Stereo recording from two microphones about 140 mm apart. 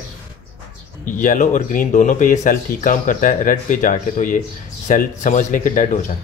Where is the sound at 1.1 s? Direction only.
70° left (ahead or behind).